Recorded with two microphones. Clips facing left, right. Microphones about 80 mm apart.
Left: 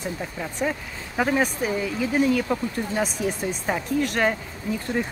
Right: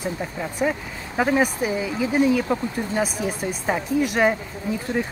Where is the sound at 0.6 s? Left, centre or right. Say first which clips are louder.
Right 3 dB; centre.